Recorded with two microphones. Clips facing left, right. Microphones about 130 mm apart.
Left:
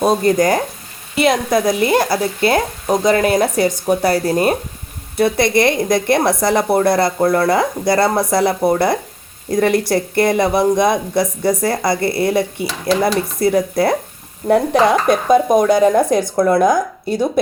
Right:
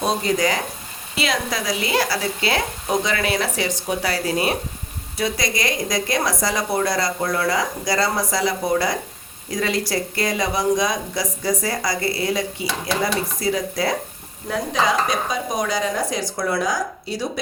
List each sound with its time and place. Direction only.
0.0 s speech: 50° left (ahead or behind)